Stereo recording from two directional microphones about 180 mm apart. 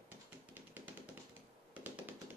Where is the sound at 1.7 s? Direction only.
10° right (ahead or behind).